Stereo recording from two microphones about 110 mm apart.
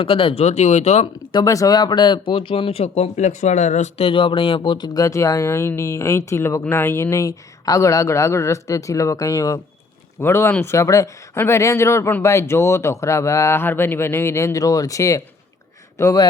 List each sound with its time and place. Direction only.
0.0 s speech: 55° left (ahead or behind); by 1.0 s 85° left
1.3 s speech: 35° left (ahead or behind)
4.9 s speech: 30° left (ahead or behind)